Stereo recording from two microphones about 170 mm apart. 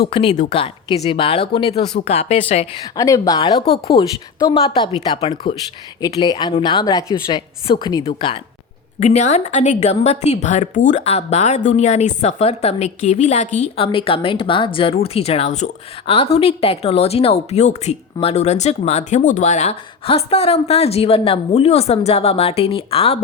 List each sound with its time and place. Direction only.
0.1 s a woman's voice: 35° left (ahead or behind)
2.8 s a woman's voice: 20° left (ahead or behind)
9.0 s a woman's voice: 40° left (ahead or behind)